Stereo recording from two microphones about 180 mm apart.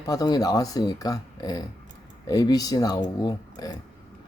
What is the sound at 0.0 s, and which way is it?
A man's voice, 20° left (ahead or behind).